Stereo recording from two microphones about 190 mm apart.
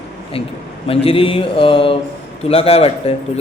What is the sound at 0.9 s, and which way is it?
A man's voice, 30° left (ahead or behind).